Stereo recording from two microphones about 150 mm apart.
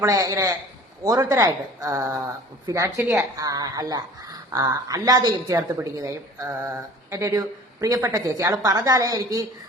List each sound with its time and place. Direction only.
0.0 s a woman's voice: 20° right (ahead or behind)